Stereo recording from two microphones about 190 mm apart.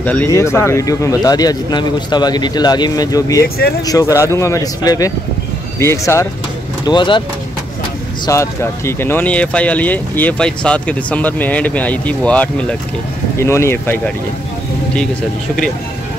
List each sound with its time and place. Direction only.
0.0 s speech: 10° left (ahead or behind)
3.4 s speech: 55° left (ahead or behind)
3.8 s speech: 20° left (ahead or behind)
6.9 s speech: 25° left (ahead or behind)
8.3 s speech: 15° left (ahead or behind)